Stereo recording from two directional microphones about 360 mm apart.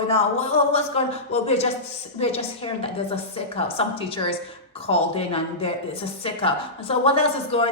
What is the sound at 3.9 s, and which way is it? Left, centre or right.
A woman's voice, centre.